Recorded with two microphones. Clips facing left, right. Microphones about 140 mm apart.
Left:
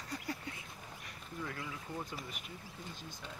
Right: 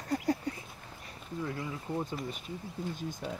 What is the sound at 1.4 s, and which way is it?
Speech, 25° right (ahead or behind).